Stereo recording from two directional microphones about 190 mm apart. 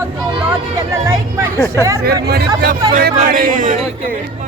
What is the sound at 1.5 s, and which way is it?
Speech, 15° left (ahead or behind).